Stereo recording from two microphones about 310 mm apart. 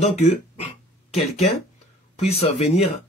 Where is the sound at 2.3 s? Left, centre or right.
Centre.